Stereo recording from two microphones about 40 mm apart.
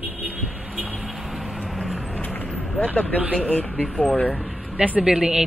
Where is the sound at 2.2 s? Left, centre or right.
Left.